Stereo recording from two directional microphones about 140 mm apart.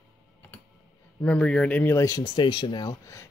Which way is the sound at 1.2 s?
10° left (ahead or behind).